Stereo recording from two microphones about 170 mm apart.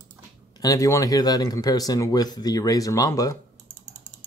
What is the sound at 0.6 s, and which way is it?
Speech, 20° left (ahead or behind).